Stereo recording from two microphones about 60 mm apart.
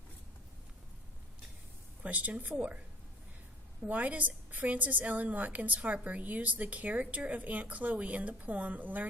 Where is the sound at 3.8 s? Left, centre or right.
Right.